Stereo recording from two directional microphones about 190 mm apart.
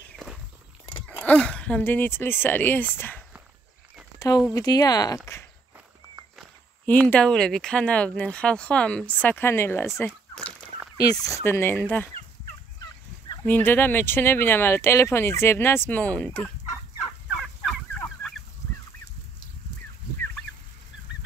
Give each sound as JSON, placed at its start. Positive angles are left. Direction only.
{"t": 1.0, "sound": "speech", "side_deg": 5}
{"t": 4.6, "sound": "speech", "side_deg": 20}
{"t": 6.9, "sound": "speech", "side_deg": 5}
{"t": 10.0, "sound": "a sound", "side_deg": 5}
{"t": 11.0, "sound": "speech", "side_deg": 20}
{"t": 13.3, "sound": "speech", "side_deg": 15}
{"t": 17.4, "sound": "fowl", "side_deg": 0}